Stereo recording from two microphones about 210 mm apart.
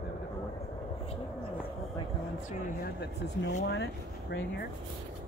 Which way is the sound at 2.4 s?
45° left (ahead or behind).